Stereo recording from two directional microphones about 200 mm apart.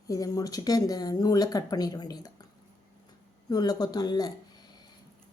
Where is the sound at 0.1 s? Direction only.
20° left (ahead or behind).